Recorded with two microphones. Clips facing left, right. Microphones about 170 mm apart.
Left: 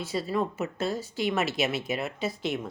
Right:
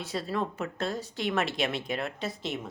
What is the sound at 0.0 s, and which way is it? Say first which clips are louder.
A woman's voice: left 3 dB; centre (ahead or behind).